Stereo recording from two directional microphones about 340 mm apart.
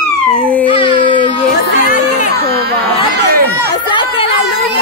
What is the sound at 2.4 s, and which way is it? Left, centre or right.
Speech, right.